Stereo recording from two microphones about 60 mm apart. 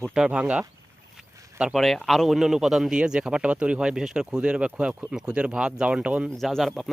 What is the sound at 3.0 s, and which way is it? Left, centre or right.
Speech, centre.